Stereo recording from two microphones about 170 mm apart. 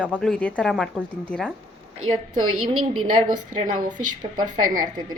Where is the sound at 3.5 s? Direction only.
50° right (ahead or behind).